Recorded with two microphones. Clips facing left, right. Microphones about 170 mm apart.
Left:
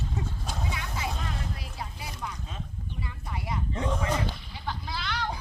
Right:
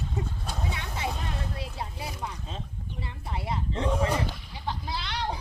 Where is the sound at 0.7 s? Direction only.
25° right (ahead or behind).